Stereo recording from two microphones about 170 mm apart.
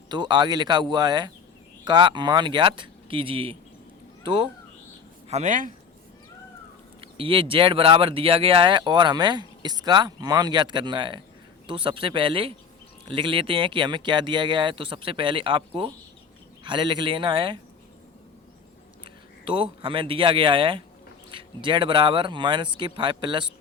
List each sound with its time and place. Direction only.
0.1 s speech: 25° right (ahead or behind)
5.3 s speech: 45° right (ahead or behind)
7.0 s a man's voice: 30° right (ahead or behind)
19.0 s speech: 30° right (ahead or behind)